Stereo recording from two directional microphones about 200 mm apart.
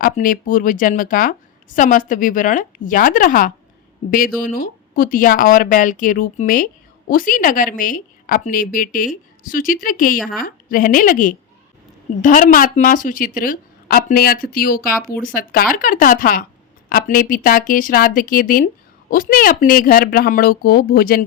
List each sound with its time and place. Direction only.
0.0 s a woman's voice: 45° left (ahead or behind)